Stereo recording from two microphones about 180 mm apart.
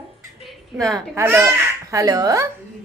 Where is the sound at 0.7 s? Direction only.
5° right (ahead or behind).